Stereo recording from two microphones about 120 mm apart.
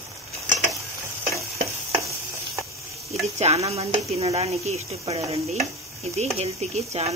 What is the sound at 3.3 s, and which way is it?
Speech, 60° right (ahead or behind).